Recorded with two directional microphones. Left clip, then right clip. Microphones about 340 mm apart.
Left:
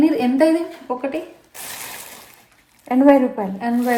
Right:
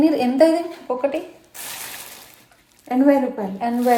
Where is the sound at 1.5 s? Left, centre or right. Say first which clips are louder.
Left 1 dB; centre.